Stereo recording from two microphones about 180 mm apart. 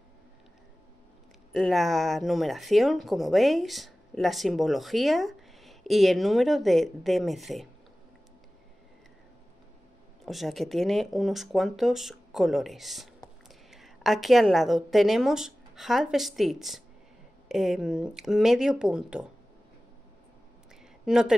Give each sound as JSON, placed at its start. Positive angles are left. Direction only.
{"t": 1.5, "sound": "speech", "side_deg": 0}
{"t": 10.2, "sound": "a woman's voice", "side_deg": 0}
{"t": 21.0, "sound": "speech", "side_deg": -5}